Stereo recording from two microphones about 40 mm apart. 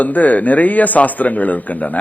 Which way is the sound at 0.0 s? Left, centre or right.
Left.